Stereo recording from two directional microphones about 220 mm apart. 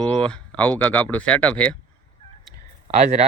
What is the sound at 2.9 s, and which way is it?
Speech, 30° right (ahead or behind).